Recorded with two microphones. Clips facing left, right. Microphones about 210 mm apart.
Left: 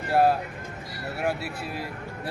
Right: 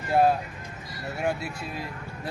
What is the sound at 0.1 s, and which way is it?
A man's voice, 5° left (ahead or behind).